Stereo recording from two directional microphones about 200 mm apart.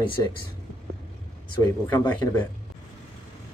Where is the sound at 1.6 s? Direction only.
15° left (ahead or behind).